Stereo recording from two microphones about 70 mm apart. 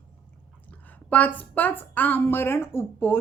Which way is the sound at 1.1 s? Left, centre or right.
Left.